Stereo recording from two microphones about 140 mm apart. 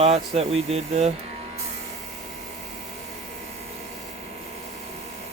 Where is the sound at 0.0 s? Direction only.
50° right (ahead or behind).